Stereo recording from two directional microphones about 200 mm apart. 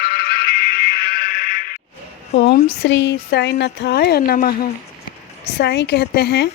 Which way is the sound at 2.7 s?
60° left (ahead or behind).